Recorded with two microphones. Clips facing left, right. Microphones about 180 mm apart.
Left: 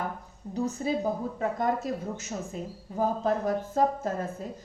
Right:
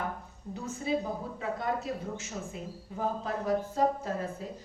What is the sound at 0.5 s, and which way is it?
A woman's voice, 40° left (ahead or behind).